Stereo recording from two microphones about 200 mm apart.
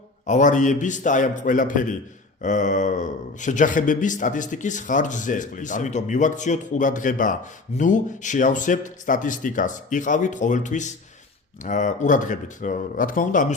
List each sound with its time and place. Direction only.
0.3 s a man's voice: 40° left (ahead or behind)